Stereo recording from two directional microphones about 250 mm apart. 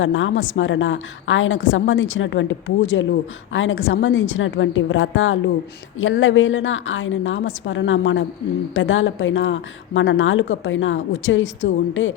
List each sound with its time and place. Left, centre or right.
0.0 s a woman's voice: left